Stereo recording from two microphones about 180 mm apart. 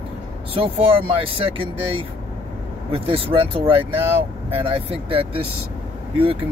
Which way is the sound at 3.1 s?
30° right (ahead or behind).